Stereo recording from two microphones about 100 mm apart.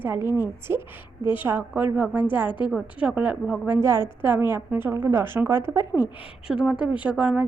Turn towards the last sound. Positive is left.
turn(degrees=-10)  # may be behind; listen again after turning